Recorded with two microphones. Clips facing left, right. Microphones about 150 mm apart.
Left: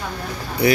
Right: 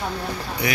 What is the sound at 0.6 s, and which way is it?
Speech, 35° left (ahead or behind).